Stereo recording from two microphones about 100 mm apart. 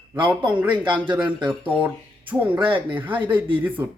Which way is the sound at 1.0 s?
50° right (ahead or behind).